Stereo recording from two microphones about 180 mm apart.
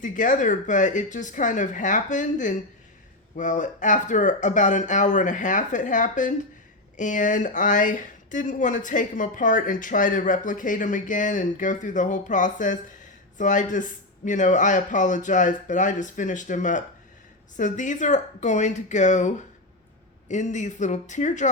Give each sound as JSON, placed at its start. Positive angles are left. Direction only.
{"t": 0.0, "sound": "speech", "side_deg": 45}